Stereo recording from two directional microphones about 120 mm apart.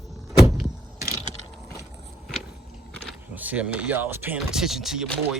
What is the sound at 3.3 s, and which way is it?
Speech, 15° right (ahead or behind).